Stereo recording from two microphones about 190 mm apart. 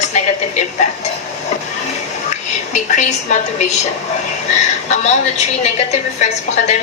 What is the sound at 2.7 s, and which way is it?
Speech, 40° left (ahead or behind).